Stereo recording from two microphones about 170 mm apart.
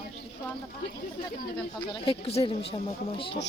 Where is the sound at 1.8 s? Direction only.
30° left (ahead or behind).